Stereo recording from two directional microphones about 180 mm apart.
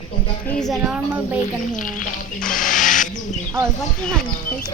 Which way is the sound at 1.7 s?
45° left (ahead or behind).